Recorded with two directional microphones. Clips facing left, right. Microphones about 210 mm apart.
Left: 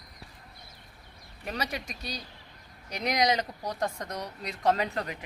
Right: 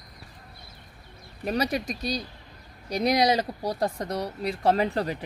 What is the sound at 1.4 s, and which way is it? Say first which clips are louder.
Speech: right 8 dB; 35° right (ahead or behind).